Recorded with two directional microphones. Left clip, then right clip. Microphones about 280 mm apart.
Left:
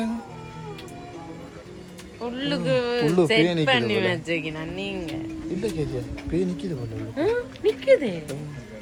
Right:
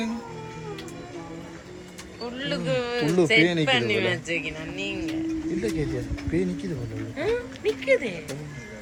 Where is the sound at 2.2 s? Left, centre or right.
Left.